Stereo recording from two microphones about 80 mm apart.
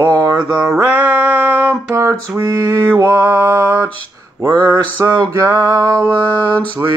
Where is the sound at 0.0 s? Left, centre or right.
Right.